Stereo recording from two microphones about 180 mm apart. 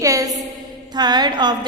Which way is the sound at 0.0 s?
20° right (ahead or behind).